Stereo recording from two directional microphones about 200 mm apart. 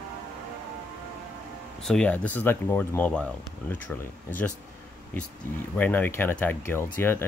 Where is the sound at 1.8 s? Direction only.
5° left (ahead or behind).